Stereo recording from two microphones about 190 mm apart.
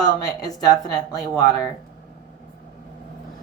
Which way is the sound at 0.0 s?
20° left (ahead or behind).